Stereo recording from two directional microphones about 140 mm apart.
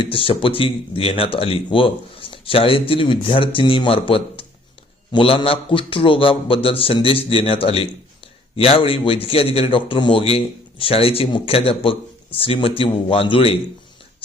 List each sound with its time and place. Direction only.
0.0 s a man's voice: 40° left (ahead or behind)